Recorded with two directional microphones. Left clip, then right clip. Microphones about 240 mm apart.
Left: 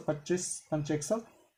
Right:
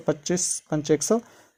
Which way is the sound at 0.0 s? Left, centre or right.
Right.